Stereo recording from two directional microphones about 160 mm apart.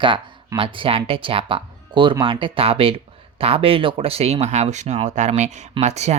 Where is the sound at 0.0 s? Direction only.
30° right (ahead or behind).